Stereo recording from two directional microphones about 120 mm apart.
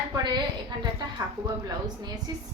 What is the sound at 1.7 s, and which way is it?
Speech, 35° right (ahead or behind).